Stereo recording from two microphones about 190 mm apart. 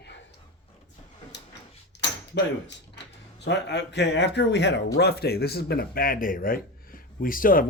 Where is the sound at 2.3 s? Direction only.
70° left (ahead or behind).